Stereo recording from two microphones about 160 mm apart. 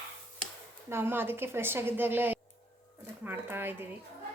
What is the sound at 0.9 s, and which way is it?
A woman's voice, 15° right (ahead or behind).